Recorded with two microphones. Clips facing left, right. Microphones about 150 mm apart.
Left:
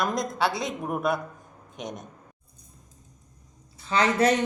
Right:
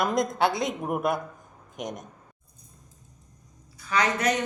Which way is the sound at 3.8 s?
25° left (ahead or behind).